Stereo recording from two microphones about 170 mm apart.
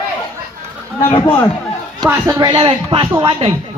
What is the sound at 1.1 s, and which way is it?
Speech, 25° left (ahead or behind).